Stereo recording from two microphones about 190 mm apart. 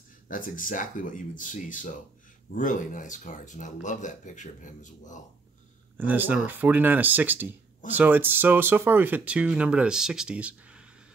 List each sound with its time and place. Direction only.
0.3 s speech: 45° left (ahead or behind)
5.9 s speech: 10° right (ahead or behind)